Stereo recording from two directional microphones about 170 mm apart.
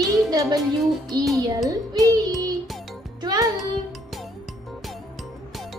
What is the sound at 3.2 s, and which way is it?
Music, 25° right (ahead or behind).